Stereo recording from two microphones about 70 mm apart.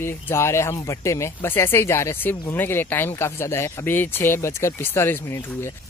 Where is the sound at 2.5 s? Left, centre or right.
Left.